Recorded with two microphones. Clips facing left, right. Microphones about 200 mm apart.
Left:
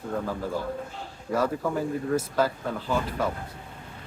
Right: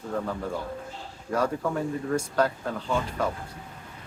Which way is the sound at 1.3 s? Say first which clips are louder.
Left 1 dB; centre (ahead or behind).